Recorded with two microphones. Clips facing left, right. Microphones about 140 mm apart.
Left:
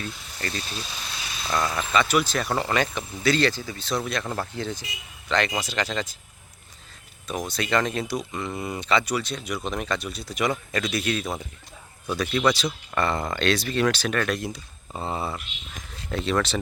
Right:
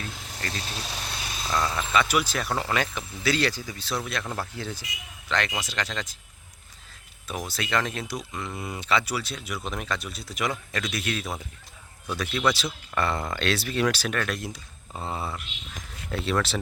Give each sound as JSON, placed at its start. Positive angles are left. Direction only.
{"t": 0.1, "sound": "vehicle", "side_deg": -90}
{"t": 1.5, "sound": "speech", "side_deg": 5}
{"t": 2.0, "sound": "speech", "side_deg": -10}
{"t": 7.3, "sound": "speech", "side_deg": -5}